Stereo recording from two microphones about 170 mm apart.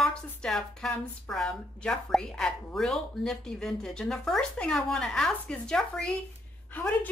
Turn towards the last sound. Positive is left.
turn(degrees=10)  # may be behind; listen again after turning